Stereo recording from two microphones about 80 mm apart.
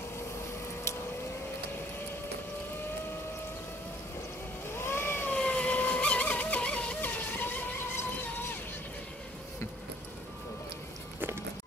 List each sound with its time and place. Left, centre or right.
4.6 s vehicle: left
5.3 s vehicle: centre; by 8.5 s left
11.1 s music: right